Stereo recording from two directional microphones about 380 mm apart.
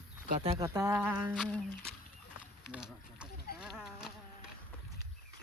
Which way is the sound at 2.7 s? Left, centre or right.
Centre.